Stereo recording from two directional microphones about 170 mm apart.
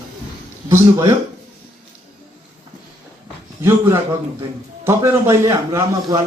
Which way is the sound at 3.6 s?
15° right (ahead or behind).